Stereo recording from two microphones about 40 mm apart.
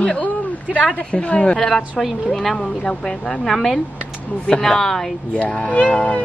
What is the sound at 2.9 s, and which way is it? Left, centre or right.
Speech, centre.